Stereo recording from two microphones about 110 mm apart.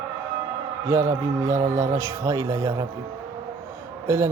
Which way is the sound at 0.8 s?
25° right (ahead or behind).